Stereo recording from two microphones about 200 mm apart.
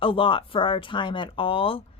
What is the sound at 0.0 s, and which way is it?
Speech, 25° left (ahead or behind).